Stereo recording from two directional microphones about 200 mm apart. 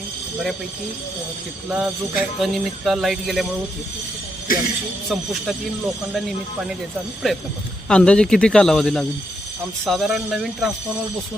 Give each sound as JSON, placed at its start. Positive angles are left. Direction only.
{"t": 1.7, "sound": "speech", "side_deg": 0}
{"t": 4.5, "sound": "speech", "side_deg": 45}
{"t": 5.0, "sound": "speech", "side_deg": 0}